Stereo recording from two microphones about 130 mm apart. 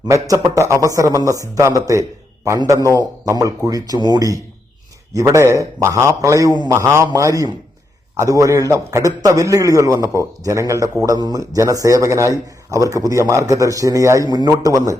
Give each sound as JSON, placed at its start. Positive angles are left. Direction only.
{"t": 0.5, "sound": "a man's voice", "side_deg": -25}